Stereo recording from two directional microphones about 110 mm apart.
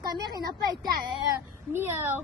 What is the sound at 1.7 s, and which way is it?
Speech, 20° right (ahead or behind).